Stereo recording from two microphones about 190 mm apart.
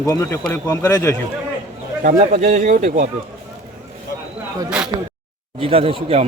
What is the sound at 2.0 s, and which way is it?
Speech, 45° right (ahead or behind).